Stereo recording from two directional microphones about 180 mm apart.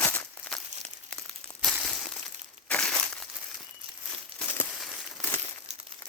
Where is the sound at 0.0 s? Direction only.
10° left (ahead or behind).